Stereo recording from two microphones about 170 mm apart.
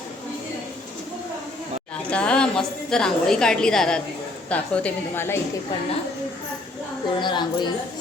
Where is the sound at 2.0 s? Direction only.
5° left (ahead or behind).